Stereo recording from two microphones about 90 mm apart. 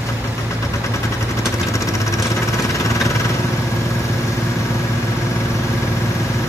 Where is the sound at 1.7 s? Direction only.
35° left (ahead or behind).